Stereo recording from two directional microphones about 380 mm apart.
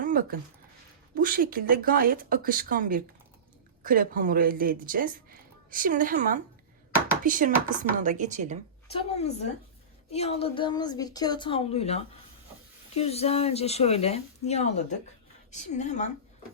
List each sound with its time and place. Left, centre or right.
0.0 s a sound: right
1.1 s speech: right
8.9 s speech: centre